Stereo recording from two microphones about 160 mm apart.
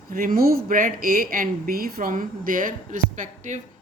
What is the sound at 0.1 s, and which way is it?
A woman's voice, 65° right (ahead or behind).